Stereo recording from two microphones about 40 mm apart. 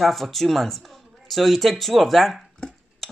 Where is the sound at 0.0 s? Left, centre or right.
Centre.